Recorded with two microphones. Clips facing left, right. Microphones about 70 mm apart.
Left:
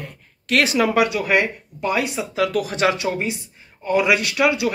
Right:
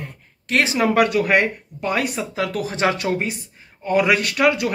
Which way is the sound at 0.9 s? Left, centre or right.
Right.